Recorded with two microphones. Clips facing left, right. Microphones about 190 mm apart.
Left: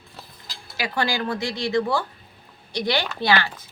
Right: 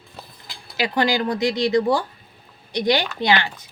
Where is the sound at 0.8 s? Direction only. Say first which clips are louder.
Right 5 dB; 20° right (ahead or behind).